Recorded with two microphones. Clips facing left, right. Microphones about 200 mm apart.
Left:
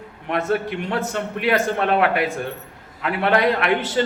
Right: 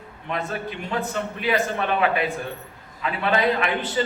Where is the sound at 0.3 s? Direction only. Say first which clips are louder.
Left 7 dB; 70° left (ahead or behind).